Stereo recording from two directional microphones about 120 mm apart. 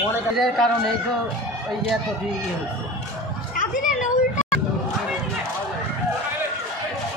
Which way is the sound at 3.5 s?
90° left.